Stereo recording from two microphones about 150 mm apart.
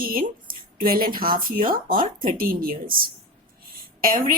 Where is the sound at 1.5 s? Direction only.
70° right (ahead or behind).